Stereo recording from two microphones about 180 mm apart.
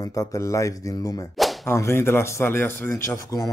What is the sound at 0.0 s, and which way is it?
Speech, 20° left (ahead or behind).